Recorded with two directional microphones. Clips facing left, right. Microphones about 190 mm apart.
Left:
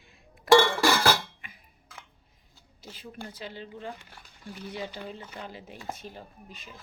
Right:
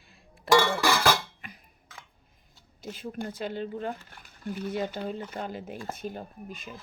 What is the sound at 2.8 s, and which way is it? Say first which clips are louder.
Speech: right 7 dB; 50° right (ahead or behind).